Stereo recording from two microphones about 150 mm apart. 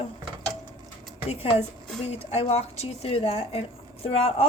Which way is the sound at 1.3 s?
45° left (ahead or behind).